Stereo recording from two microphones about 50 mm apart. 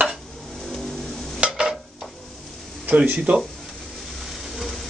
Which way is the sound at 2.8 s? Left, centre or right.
Right.